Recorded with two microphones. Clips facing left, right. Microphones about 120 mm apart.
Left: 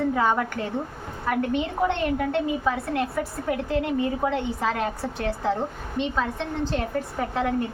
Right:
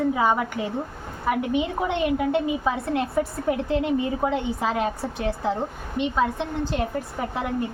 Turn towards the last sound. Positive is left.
turn(degrees=-15)  # may be behind; listen again after turning